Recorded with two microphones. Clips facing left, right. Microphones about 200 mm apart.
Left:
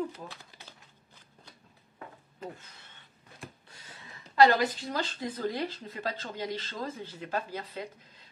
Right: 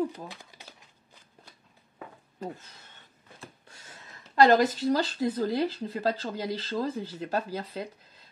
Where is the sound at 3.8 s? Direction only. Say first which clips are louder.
Even; 45° right (ahead or behind).